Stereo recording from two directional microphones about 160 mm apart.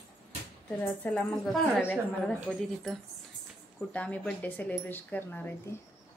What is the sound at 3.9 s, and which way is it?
A woman's voice, 10° left (ahead or behind).